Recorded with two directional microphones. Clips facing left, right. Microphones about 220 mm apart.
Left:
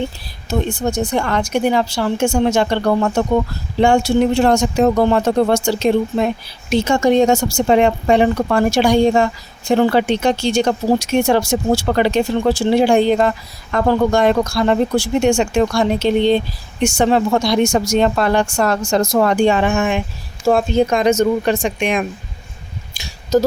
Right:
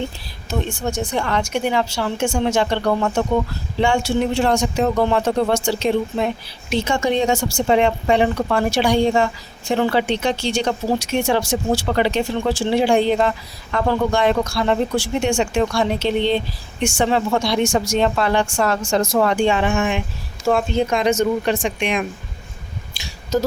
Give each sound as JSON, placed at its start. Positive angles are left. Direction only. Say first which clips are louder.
{"t": 1.1, "sound": "a woman's voice", "louder": "left 3 dB", "side_deg": 45}